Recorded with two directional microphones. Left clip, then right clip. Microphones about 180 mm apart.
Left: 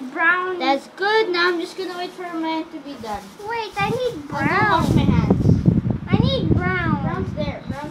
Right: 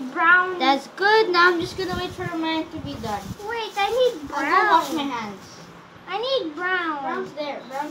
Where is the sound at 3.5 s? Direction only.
30° left (ahead or behind).